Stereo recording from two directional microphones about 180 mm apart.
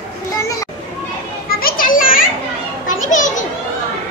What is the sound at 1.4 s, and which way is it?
Children playing, 55° left (ahead or behind).